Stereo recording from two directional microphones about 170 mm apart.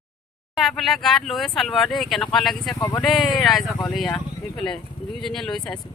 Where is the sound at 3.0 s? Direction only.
Centre (ahead or behind).